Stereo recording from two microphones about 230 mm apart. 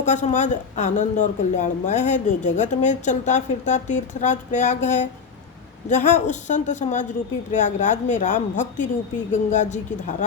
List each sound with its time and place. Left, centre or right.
0.0 s speech: left